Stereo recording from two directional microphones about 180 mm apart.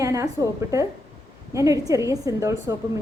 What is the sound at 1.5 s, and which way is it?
A woman's voice, 20° right (ahead or behind).